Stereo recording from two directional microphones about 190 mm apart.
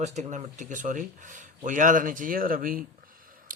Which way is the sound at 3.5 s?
45° right (ahead or behind).